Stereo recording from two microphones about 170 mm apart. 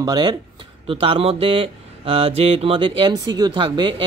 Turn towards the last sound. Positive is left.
turn(degrees=-30)  # may be behind; listen again after turning